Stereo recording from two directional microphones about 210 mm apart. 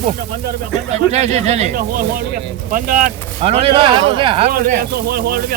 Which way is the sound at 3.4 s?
30° right (ahead or behind).